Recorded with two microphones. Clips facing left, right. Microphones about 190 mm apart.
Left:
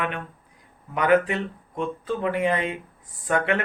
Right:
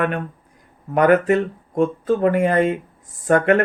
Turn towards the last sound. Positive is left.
turn(degrees=-50)  # may be behind; listen again after turning